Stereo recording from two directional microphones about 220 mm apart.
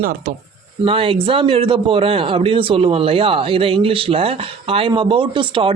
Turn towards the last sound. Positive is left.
turn(degrees=-25)  # may be behind; listen again after turning